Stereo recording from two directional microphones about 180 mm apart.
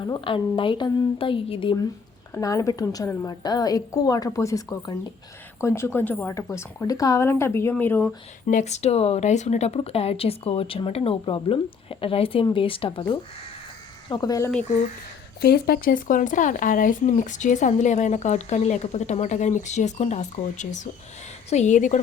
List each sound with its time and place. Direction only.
0.0 s a woman's voice: 25° left (ahead or behind); by 8.1 s 10° left (ahead or behind)
8.4 s speech: 40° left (ahead or behind)
14.1 s a woman's voice: 20° left (ahead or behind)
15.4 s speech: 60° left (ahead or behind); by 22.0 s 45° left (ahead or behind)